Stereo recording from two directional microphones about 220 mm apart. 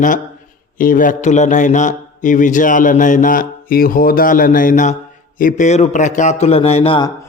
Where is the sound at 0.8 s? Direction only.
40° left (ahead or behind).